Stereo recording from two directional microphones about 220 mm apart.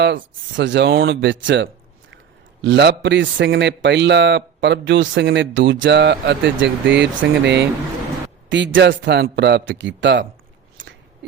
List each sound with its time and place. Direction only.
0.0 s a man's voice: 55° right (ahead or behind)
11.2 s owl: 55° right (ahead or behind)